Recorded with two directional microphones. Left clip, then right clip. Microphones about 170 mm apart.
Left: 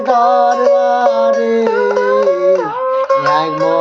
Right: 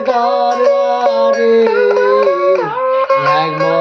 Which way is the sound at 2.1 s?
40° right (ahead or behind).